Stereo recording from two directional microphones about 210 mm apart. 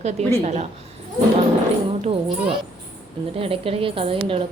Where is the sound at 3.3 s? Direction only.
25° right (ahead or behind).